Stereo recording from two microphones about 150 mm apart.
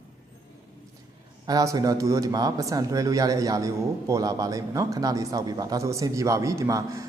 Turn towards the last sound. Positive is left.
turn(degrees=-20)  # may be behind; listen again after turning